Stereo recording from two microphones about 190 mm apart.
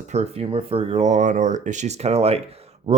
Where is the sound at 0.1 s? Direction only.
35° right (ahead or behind).